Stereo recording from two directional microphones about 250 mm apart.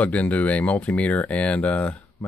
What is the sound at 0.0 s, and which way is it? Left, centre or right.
Speech, centre.